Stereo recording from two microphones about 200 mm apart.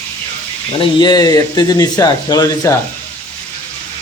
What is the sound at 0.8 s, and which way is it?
Speech, 20° left (ahead or behind).